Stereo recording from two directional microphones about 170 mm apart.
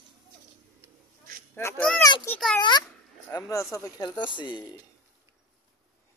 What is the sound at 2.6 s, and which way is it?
Dog, 25° left (ahead or behind).